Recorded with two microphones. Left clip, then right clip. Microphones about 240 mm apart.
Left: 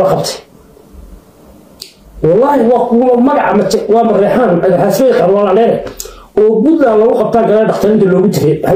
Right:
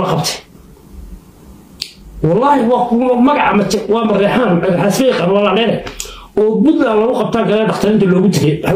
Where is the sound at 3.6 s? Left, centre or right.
Centre.